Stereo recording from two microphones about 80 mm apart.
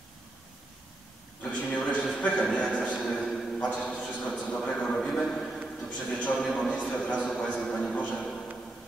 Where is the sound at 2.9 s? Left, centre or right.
Centre.